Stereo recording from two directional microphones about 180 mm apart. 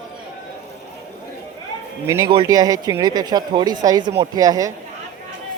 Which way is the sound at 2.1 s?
20° right (ahead or behind).